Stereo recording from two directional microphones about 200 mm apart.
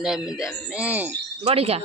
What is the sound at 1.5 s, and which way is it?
Speech, 30° right (ahead or behind).